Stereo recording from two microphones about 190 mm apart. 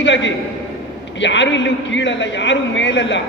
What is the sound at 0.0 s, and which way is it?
A man's voice, 70° left (ahead or behind).